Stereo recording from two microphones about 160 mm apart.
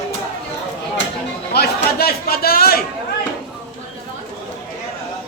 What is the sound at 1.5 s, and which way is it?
Speech, 70° left (ahead or behind).